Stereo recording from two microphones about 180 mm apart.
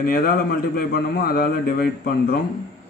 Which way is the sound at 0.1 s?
55° left (ahead or behind).